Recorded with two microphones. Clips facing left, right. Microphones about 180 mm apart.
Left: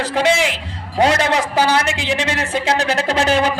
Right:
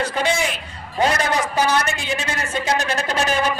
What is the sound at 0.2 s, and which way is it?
A man's voice, 90° left.